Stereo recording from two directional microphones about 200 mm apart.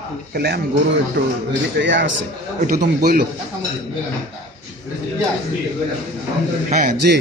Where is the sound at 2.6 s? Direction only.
50° right (ahead or behind).